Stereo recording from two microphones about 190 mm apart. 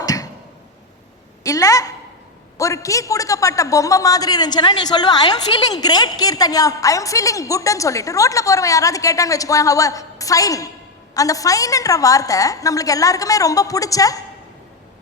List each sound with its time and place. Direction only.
0.0 s tick-tock: 20° left (ahead or behind)
1.5 s a man's voice: 20° left (ahead or behind)